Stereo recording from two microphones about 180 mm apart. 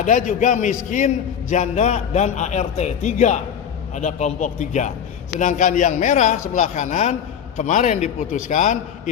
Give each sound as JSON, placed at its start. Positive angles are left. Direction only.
{"t": 0.0, "sound": "a man's voice", "side_deg": 45}